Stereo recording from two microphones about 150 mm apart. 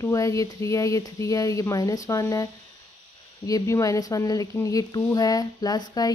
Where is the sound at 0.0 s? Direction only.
20° left (ahead or behind).